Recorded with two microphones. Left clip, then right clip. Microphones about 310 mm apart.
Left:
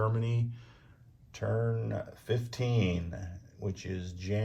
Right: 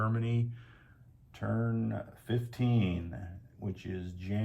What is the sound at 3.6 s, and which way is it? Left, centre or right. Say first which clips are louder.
Speech: left 2 dB; left.